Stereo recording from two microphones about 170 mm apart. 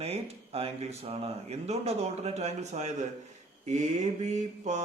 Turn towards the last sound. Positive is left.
turn(degrees=-45)  # may be behind; listen again after turning